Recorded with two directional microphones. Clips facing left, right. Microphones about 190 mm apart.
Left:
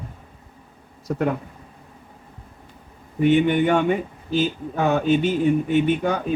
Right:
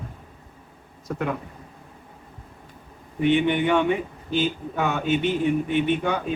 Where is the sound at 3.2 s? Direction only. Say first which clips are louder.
Left 3 dB; 45° left (ahead or behind).